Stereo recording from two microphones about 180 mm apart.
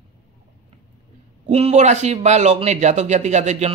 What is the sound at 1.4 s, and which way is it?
Speech, 35° right (ahead or behind).